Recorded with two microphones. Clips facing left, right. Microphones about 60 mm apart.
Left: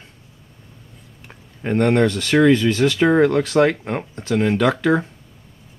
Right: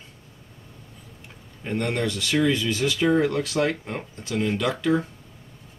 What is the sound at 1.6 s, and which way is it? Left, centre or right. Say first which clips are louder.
Speech: left 9 dB; left.